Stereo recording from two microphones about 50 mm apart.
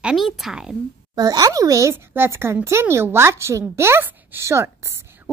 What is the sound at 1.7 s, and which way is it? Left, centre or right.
Speech, right.